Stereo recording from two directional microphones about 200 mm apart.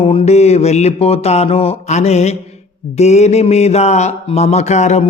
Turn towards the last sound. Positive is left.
turn(degrees=35)  # may be behind; listen again after turning